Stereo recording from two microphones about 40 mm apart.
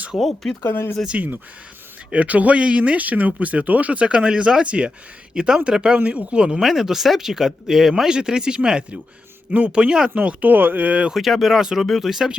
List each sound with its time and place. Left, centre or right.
0.2 s speech: centre
0.6 s speech: left
1.1 s speech: right
6.1 s speech: right
6.6 s speech: centre
8.1 s speech: right
9.5 s speech: right
10.4 s speech: right
11.1 s speech: centre
11.6 s speech: centre